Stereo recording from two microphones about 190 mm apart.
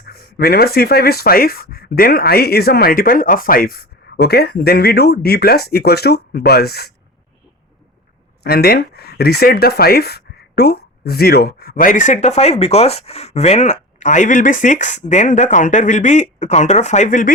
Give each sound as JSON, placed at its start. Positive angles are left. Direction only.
{"t": 0.0, "sound": "speech", "side_deg": 55}
{"t": 8.4, "sound": "speech", "side_deg": 55}